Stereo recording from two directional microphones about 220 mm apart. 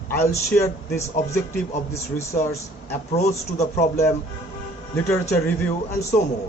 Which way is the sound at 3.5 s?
30° left (ahead or behind).